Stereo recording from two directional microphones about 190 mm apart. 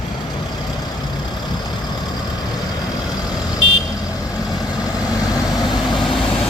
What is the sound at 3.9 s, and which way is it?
Vehicle, 20° left (ahead or behind).